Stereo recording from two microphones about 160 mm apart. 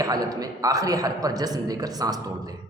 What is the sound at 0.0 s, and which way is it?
A man's voice, 20° right (ahead or behind).